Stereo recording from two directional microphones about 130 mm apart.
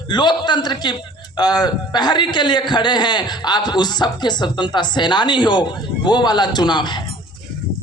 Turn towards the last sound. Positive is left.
turn(degrees=35)  # may be behind; listen again after turning